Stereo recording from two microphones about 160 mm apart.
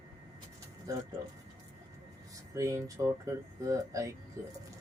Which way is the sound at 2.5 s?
20° right (ahead or behind).